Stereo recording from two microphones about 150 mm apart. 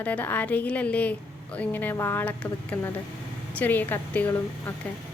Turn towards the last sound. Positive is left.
turn(degrees=10)  # may be behind; listen again after turning